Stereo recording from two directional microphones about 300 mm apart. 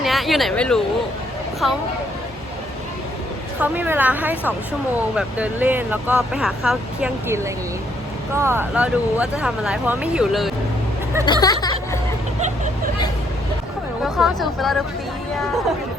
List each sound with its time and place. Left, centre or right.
0.0 s speech: centre
3.6 s speech: centre
11.3 s hubbub: centre
12.4 s vehicle: right
14.0 s speech: centre